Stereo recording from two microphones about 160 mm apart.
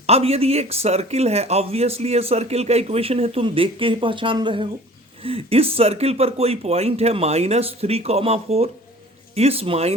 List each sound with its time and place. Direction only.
0.1 s speech: 40° right (ahead or behind)